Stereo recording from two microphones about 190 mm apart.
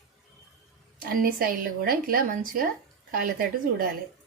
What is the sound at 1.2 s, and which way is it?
Speech, 50° right (ahead or behind).